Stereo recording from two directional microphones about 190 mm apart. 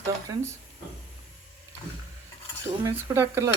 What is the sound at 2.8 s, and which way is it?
Speech, 15° right (ahead or behind).